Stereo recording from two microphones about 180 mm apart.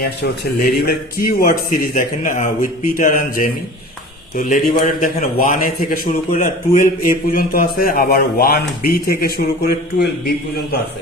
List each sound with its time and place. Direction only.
0.9 s a man's voice: 55° left (ahead or behind)